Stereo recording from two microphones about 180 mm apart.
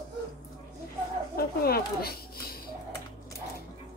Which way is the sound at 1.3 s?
60° left (ahead or behind).